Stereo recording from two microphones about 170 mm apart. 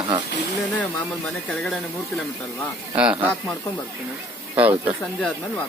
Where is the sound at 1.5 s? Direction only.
5° left (ahead or behind).